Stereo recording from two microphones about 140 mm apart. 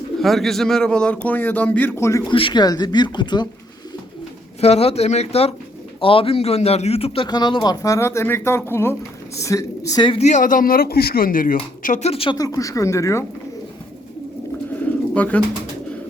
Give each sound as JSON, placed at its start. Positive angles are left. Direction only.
{"t": 0.2, "sound": "speech", "side_deg": 0}
{"t": 2.3, "sound": "speech", "side_deg": 35}
{"t": 4.6, "sound": "speech", "side_deg": 45}
{"t": 7.3, "sound": "speech", "side_deg": 30}
{"t": 10.1, "sound": "speech", "side_deg": 55}
{"t": 11.8, "sound": "speech", "side_deg": 60}
{"t": 12.4, "sound": "speech", "side_deg": 25}
{"t": 15.1, "sound": "speech", "side_deg": 10}